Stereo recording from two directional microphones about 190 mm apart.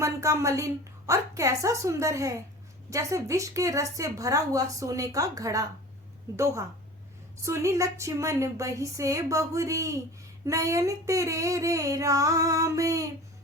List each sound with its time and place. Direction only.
0.0 s a woman's voice: 15° right (ahead or behind)